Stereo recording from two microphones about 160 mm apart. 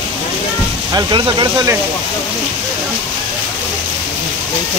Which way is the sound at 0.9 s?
25° right (ahead or behind).